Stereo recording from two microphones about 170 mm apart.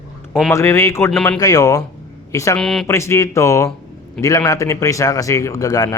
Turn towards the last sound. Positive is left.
turn(degrees=20)  # may be behind; listen again after turning